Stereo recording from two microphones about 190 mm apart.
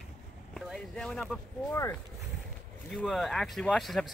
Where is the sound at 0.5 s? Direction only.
Centre (ahead or behind).